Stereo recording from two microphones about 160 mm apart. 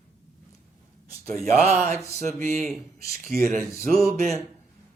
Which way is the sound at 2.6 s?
Centre (ahead or behind).